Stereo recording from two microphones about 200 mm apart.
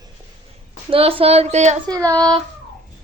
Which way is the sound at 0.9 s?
30° right (ahead or behind).